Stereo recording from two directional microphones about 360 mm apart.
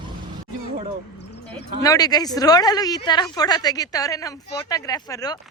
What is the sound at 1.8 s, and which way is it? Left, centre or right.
A woman's voice, centre.